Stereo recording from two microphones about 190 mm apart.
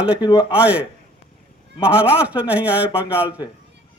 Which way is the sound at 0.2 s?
20° left (ahead or behind).